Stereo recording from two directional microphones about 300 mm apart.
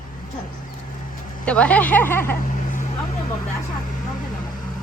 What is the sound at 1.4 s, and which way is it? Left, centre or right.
Speech, centre.